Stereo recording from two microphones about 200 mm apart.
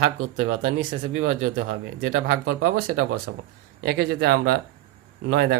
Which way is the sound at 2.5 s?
90° right.